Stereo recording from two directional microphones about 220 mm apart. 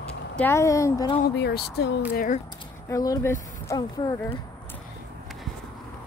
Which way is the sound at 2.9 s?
15° left (ahead or behind).